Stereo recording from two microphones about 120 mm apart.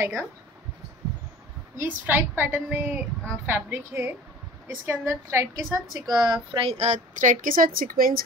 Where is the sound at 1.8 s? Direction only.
15° right (ahead or behind); by 6.6 s 35° right (ahead or behind).